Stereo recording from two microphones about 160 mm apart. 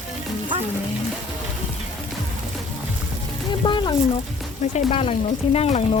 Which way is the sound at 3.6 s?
30° left (ahead or behind).